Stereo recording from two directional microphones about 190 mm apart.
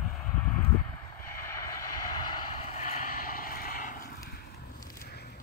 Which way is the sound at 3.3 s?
50° left (ahead or behind).